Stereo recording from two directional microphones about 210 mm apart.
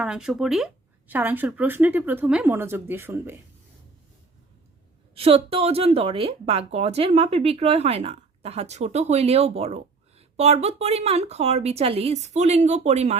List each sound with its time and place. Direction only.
0.0 s speech: 5° right (ahead or behind)
5.1 s a woman's voice: 25° right (ahead or behind)